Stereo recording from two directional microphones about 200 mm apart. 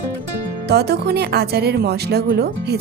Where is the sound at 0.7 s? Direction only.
55° right (ahead or behind).